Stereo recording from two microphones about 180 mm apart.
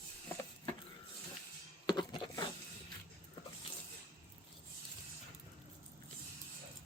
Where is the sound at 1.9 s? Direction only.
25° left (ahead or behind).